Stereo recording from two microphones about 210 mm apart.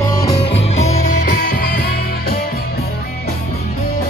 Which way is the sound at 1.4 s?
45° left (ahead or behind).